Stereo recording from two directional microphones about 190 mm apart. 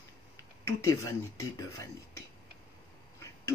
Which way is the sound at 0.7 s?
15° left (ahead or behind).